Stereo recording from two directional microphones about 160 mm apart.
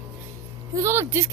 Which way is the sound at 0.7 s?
15° right (ahead or behind).